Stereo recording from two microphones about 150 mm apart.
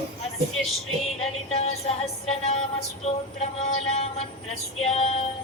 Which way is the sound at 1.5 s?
45° left (ahead or behind).